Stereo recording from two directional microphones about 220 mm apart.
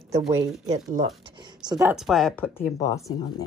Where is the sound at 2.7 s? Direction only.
15° left (ahead or behind).